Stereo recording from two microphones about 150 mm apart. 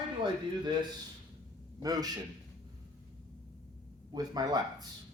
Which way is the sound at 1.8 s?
25° right (ahead or behind).